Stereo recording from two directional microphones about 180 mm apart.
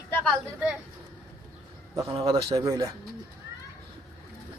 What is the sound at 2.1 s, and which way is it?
Speech, 25° right (ahead or behind).